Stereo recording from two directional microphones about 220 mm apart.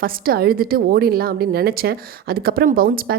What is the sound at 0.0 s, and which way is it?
A woman's voice, 45° right (ahead or behind).